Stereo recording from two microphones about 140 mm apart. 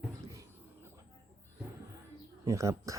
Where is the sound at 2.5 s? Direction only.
20° right (ahead or behind).